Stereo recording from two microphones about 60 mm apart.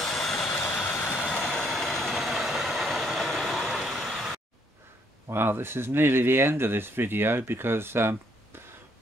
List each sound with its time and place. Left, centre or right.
0.0 s vehicle: centre
5.3 s speech: right